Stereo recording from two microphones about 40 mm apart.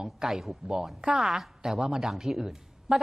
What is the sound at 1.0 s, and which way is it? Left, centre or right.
A woman's voice, centre.